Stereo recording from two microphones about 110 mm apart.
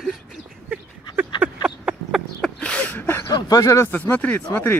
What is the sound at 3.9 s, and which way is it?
Speech, 15° left (ahead or behind).